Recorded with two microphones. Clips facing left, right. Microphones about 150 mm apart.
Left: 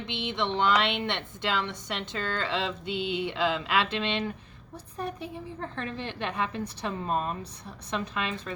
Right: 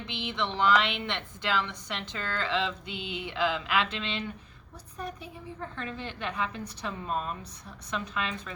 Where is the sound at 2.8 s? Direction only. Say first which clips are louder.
Left 7 dB; 25° left (ahead or behind).